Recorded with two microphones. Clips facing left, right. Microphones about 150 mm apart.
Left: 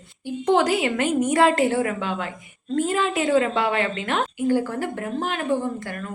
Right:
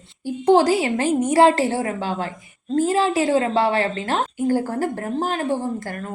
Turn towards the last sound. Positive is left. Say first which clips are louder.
# right 3 dB
turn(degrees=-35)  # may be behind; listen again after turning